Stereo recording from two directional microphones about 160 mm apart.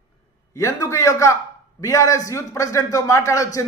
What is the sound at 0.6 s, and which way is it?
A man's voice, 20° left (ahead or behind).